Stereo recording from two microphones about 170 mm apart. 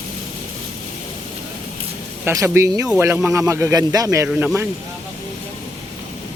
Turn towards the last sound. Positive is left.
turn(degrees=-10)  # may be behind; listen again after turning